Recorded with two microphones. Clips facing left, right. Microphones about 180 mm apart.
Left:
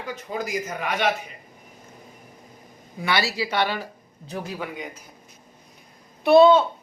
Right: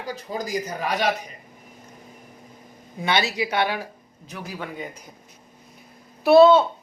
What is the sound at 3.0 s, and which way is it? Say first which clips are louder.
Speech: right 1 dB; 20° right (ahead or behind).